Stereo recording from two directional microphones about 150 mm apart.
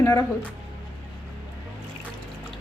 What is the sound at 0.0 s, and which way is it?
Speech, 20° left (ahead or behind).